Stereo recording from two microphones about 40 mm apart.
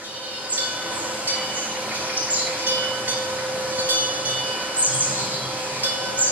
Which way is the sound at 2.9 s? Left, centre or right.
Right.